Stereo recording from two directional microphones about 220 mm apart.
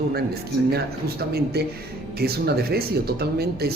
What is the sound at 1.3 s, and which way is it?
Speech, 45° right (ahead or behind).